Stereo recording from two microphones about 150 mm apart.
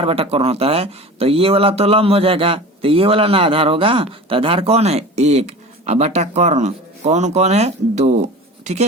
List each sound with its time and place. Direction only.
0.0 s speech: 40° right (ahead or behind)